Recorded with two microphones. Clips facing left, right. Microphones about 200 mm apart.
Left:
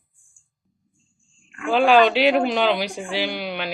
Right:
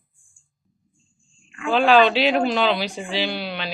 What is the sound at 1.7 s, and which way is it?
Speech, 15° left (ahead or behind).